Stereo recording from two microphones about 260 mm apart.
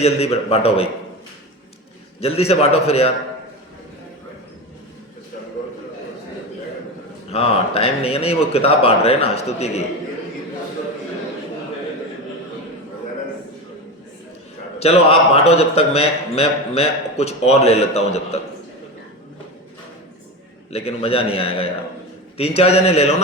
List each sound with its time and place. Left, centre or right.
0.0 s a man's voice: left
2.2 s a man's voice: left
7.3 s a man's voice: left
14.8 s a man's voice: left
20.7 s a man's voice: left